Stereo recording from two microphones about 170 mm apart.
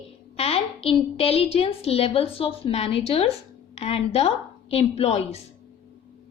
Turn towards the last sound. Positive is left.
turn(degrees=40)  # may be behind; listen again after turning